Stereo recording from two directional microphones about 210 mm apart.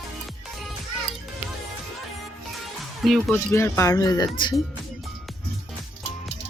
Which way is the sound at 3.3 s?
10° left (ahead or behind).